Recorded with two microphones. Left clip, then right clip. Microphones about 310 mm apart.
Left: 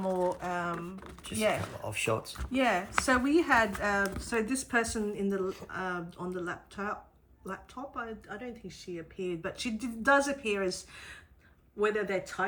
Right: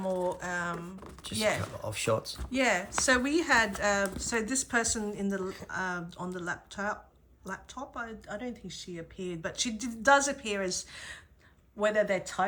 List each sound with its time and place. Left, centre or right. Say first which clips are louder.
0.0 s typing: left 1 dB; centre
1.8 s speech: right 1 dB; right
2.4 s speech: left 2 dB; centre